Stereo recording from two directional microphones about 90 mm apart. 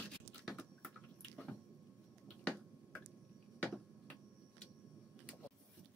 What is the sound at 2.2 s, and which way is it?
Finger snapping, 15° left (ahead or behind).